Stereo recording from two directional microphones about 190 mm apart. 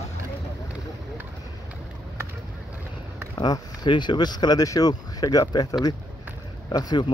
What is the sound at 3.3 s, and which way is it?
Speech, 20° left (ahead or behind).